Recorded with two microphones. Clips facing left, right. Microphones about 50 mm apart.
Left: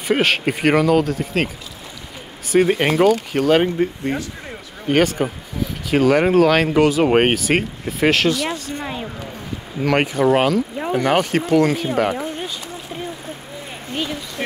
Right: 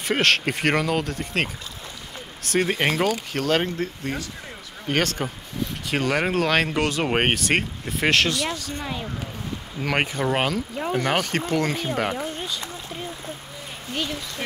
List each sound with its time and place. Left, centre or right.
0.1 s speech: centre
2.5 s speech: centre
8.5 s speech: left
9.8 s speech: centre
12.1 s a sound: centre